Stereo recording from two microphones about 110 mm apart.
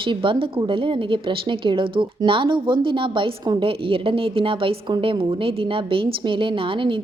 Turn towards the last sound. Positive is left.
turn(degrees=-50)  # may be behind; listen again after turning